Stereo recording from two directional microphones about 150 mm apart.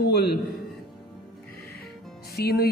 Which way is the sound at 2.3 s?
90° left.